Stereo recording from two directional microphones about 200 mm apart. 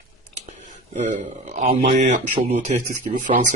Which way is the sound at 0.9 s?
35° right (ahead or behind).